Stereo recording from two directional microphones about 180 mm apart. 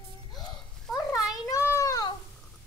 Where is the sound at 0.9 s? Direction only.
15° left (ahead or behind).